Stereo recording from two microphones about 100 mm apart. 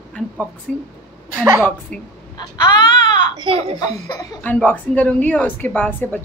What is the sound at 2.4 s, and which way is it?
Baby cry, 40° left (ahead or behind).